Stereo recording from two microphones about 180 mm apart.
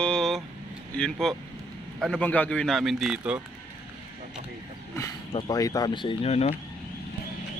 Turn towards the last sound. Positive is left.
turn(degrees=35)  # may be behind; listen again after turning